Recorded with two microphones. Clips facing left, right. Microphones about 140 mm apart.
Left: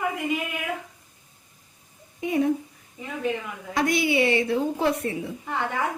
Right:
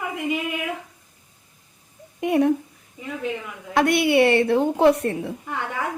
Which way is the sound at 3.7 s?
65° right (ahead or behind).